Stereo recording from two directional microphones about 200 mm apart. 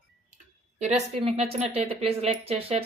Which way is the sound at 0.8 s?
35° right (ahead or behind).